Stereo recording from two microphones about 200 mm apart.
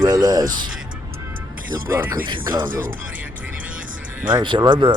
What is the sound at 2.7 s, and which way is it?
Speech, 45° right (ahead or behind).